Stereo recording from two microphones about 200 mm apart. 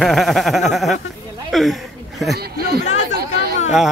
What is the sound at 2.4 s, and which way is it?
Speech, 50° right (ahead or behind).